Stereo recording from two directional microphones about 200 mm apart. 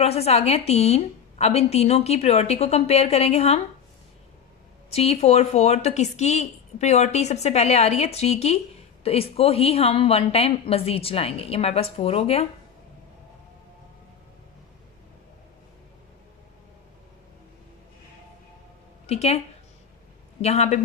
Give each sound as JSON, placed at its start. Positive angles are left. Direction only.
{"t": 0.0, "sound": "a woman's voice", "side_deg": 30}
{"t": 4.9, "sound": "a woman's voice", "side_deg": 30}
{"t": 19.0, "sound": "a woman's voice", "side_deg": 30}
{"t": 20.4, "sound": "a woman's voice", "side_deg": 30}